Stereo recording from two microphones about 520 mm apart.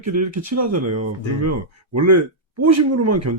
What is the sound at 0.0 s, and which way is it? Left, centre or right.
Speech, right.